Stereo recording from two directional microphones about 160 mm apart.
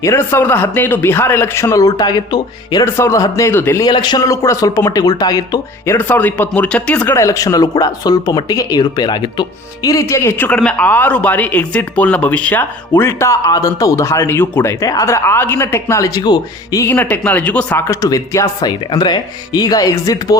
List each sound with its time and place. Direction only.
0.0 s speech: 15° left (ahead or behind)
3.8 s speech: 25° left (ahead or behind)